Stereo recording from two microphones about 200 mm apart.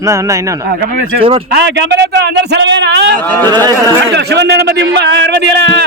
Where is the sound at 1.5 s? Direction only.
55° right (ahead or behind).